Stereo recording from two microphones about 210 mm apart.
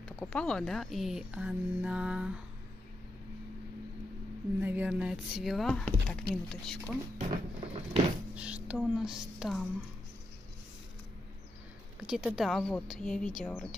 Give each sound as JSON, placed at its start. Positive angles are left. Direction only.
{"t": 0.0, "sound": "speech", "side_deg": 5}
{"t": 4.6, "sound": "speech", "side_deg": -10}
{"t": 7.2, "sound": "a sound", "side_deg": -30}
{"t": 8.4, "sound": "speech", "side_deg": -5}
{"t": 12.1, "sound": "speech", "side_deg": -5}